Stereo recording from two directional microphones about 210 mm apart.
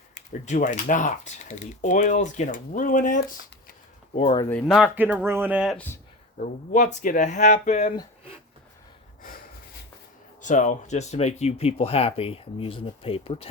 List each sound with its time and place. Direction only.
0.1 s a sound: 35° left (ahead or behind)
0.9 s speech: 35° left (ahead or behind)
4.4 s speech: 10° left (ahead or behind)
4.7 s speech: 5° right (ahead or behind)
6.4 s speech: 35° left (ahead or behind)
10.4 s speech: 35° left (ahead or behind)